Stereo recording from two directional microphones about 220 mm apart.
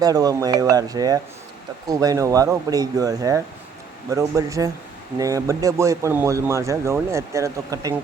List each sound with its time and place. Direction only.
0.0 s a man's voice: 15° right (ahead or behind)